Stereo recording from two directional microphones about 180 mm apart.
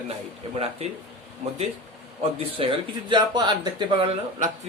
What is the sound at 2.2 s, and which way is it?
Speech, 30° right (ahead or behind).